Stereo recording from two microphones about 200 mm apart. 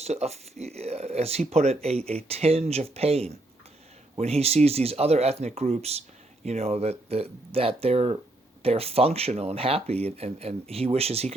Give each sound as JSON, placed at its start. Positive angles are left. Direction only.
{"t": 0.0, "sound": "speech", "side_deg": -35}